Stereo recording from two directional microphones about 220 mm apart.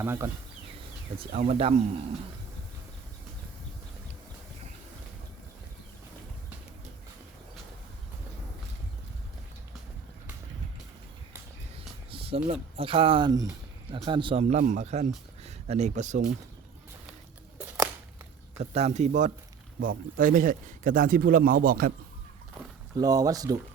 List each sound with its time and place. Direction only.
0.0 s speech: 10° right (ahead or behind)
1.2 s speech: 25° right (ahead or behind)
12.1 s a sound: 25° right (ahead or behind)
12.5 s speech: 25° right (ahead or behind)
17.6 s a sound: 10° right (ahead or behind)
18.6 s speech: 30° right (ahead or behind)
23.0 s speech: 15° right (ahead or behind)